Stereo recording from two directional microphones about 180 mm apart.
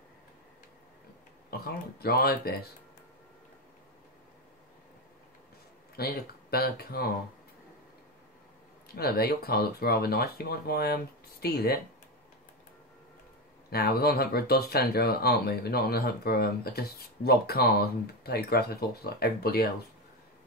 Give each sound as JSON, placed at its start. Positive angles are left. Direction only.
{"t": 1.5, "sound": "speech", "side_deg": 60}
{"t": 5.9, "sound": "speech", "side_deg": 60}
{"t": 8.8, "sound": "speech", "side_deg": 60}
{"t": 13.7, "sound": "speech", "side_deg": 60}